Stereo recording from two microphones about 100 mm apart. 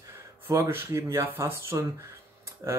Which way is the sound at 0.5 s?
30° right (ahead or behind).